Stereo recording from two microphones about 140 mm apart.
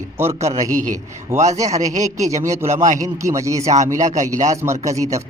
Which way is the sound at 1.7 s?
55° right (ahead or behind).